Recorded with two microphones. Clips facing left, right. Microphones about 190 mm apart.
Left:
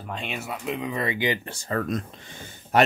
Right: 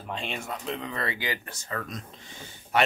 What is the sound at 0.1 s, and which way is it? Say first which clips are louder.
Speech: left 1 dB; centre (ahead or behind).